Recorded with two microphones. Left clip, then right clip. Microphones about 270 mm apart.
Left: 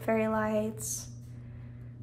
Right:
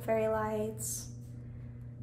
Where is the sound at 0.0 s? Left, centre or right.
Left.